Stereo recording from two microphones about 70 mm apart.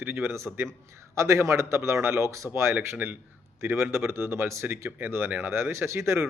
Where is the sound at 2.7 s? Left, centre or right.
Right.